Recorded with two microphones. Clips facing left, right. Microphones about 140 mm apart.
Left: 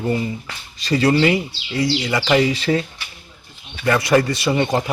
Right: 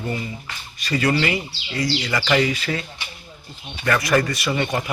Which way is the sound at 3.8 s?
25° left (ahead or behind).